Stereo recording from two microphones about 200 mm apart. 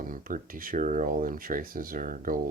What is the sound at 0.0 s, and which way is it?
Speech, 45° right (ahead or behind).